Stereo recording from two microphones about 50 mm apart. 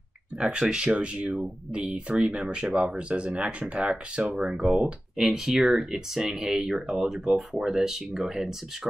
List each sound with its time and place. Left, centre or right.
0.4 s speech: centre
5.1 s speech: centre